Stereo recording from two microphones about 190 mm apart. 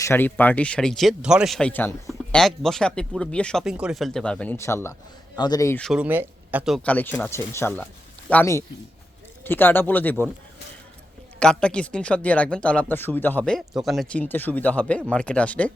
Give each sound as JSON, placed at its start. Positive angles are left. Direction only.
{"t": 0.0, "sound": "speech", "side_deg": 10}
{"t": 5.8, "sound": "speech", "side_deg": -5}
{"t": 11.3, "sound": "speech", "side_deg": 5}